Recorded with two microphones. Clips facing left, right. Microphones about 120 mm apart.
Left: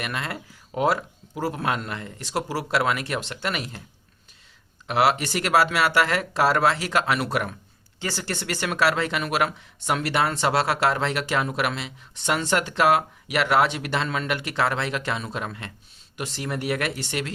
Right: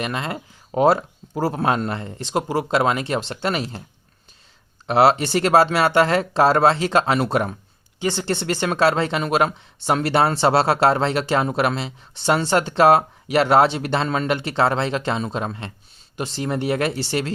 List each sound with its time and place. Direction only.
0.0 s speech: 25° right (ahead or behind)
4.9 s speech: 30° right (ahead or behind)